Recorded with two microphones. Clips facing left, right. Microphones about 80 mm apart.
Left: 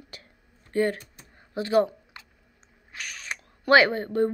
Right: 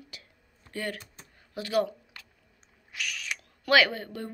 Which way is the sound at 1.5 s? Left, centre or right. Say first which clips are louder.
Left 5 dB; left.